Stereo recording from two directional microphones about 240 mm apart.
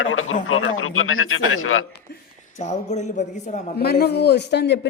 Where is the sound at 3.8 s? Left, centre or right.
Left.